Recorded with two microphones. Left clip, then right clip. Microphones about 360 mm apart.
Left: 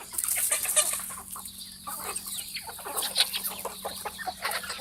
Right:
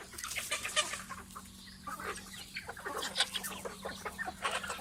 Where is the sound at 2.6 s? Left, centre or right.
Centre.